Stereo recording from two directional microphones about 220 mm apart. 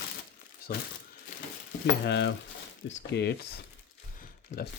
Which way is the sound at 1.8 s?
50° left (ahead or behind).